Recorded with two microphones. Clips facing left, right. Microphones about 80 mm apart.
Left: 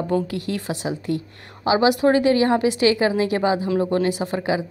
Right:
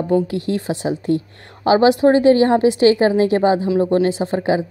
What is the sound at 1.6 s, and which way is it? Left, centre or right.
Speech, right.